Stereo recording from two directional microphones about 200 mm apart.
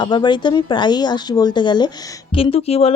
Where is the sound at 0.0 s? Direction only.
20° left (ahead or behind).